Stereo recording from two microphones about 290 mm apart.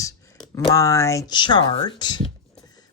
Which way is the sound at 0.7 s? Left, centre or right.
Centre.